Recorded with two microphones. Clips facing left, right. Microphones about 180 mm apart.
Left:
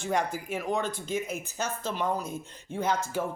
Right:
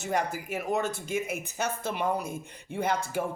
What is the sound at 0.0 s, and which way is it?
Speech, 5° right (ahead or behind).